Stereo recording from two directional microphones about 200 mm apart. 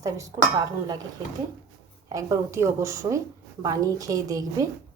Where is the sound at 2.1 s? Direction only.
15° right (ahead or behind).